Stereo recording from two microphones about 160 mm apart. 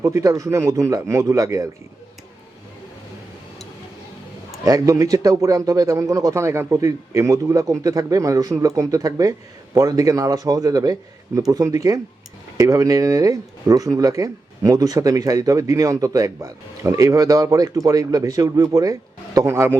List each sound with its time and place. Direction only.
0.0 s speech: 20° right (ahead or behind)
4.6 s speech: 20° right (ahead or behind)